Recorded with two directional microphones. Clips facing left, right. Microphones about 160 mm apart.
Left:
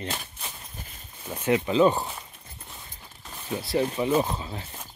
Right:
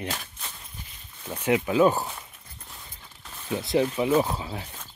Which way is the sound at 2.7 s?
10° left (ahead or behind).